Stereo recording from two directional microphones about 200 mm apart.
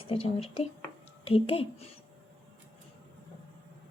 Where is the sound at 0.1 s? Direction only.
30° left (ahead or behind).